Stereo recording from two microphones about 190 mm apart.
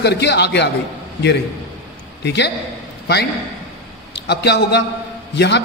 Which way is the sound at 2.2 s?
65° left (ahead or behind).